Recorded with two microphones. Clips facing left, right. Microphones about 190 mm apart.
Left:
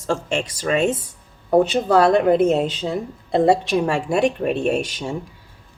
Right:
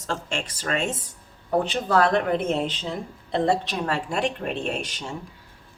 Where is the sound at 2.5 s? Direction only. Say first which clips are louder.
Left 6 dB; 45° left (ahead or behind).